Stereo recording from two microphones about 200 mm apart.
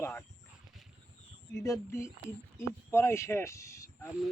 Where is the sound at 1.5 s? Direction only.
15° left (ahead or behind).